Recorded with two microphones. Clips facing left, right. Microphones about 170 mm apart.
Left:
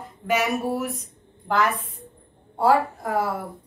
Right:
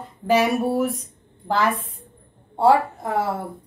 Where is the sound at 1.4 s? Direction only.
30° right (ahead or behind).